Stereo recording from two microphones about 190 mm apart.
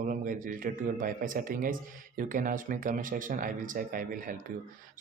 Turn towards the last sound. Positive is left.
turn(degrees=-45)  # may be behind; listen again after turning